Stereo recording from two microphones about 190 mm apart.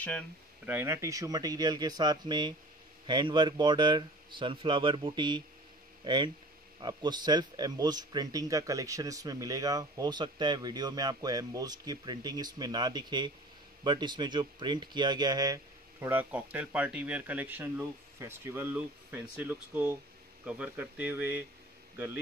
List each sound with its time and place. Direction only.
0.7 s a man's voice: 10° right (ahead or behind)